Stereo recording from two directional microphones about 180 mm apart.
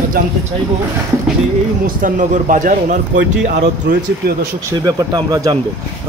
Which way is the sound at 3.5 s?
70° right (ahead or behind).